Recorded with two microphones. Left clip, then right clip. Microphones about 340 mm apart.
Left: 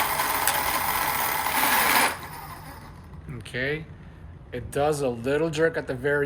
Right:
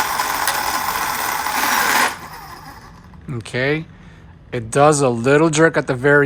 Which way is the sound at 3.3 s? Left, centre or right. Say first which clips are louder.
Right 9 dB; centre.